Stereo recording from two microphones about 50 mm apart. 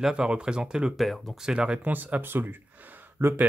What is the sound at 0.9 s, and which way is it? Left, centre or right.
Speech, centre.